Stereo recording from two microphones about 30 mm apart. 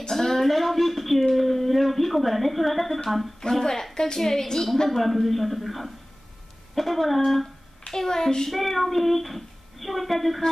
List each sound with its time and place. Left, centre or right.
0.1 s a sound: centre
0.5 s speech: centre
3.3 s a woman's voice: centre
4.8 s speech: centre
7.9 s a woman's voice: centre
8.5 s speech: centre